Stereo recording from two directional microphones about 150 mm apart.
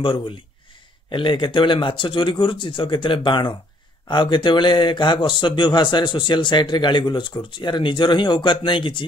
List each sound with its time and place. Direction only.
0.0 s speech: 35° left (ahead or behind)